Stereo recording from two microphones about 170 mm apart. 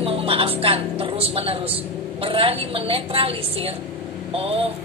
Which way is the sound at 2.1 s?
30° right (ahead or behind).